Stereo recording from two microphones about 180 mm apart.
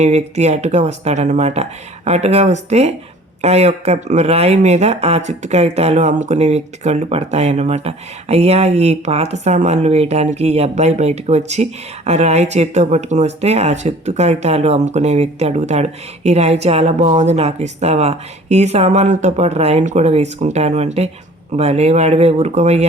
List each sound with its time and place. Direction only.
0.0 s speech: 40° right (ahead or behind)